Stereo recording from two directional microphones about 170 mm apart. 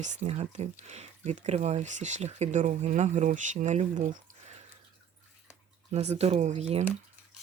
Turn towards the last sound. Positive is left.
turn(degrees=-40)  # may be behind; listen again after turning